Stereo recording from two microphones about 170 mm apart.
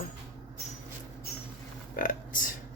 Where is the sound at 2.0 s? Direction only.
55° left (ahead or behind).